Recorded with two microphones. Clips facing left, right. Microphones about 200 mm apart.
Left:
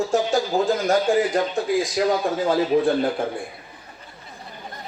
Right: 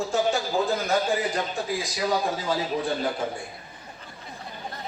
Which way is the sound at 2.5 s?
55° left (ahead or behind).